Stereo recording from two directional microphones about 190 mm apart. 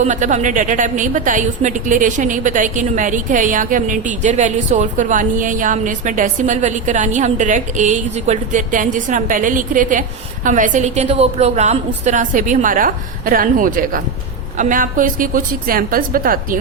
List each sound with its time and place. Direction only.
0.0 s a woman's voice: 40° right (ahead or behind)